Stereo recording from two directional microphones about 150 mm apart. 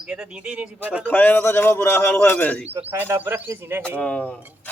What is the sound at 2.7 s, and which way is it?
Speech, 15° right (ahead or behind).